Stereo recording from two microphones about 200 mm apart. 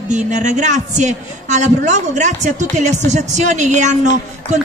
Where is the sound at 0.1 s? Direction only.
35° right (ahead or behind).